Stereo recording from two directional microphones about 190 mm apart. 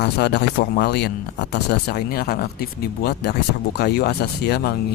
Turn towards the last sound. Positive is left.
turn(degrees=60)  # may be behind; listen again after turning